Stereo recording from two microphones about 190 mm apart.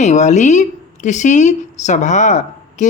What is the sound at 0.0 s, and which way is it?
Speech, 40° left (ahead or behind).